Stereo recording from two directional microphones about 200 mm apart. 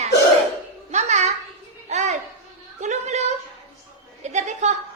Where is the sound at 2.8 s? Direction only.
35° right (ahead or behind).